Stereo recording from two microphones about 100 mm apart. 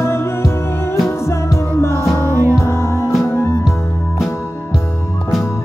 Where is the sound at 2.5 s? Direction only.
25° left (ahead or behind).